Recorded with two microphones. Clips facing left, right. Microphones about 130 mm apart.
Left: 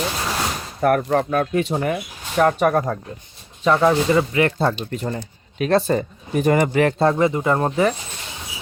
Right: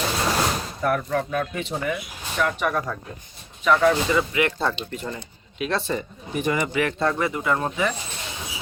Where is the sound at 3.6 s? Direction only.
30° left (ahead or behind).